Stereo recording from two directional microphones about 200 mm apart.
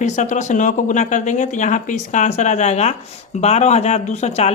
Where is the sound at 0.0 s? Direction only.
35° left (ahead or behind).